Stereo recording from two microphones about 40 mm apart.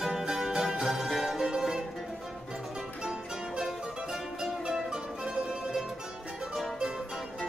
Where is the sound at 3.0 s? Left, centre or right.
Centre.